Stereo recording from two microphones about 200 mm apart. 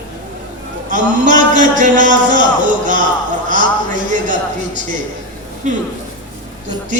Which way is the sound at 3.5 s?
40° right (ahead or behind).